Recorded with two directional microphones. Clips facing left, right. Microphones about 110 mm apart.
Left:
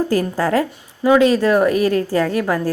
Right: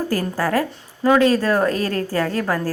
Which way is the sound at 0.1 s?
20° left (ahead or behind).